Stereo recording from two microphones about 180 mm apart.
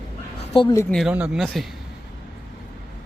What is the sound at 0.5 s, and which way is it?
Speech, 25° left (ahead or behind).